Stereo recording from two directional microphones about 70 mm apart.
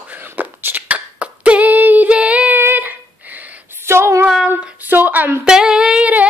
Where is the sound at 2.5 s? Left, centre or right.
Right.